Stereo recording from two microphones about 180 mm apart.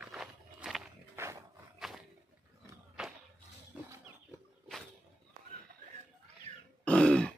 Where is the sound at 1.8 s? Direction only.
Centre (ahead or behind).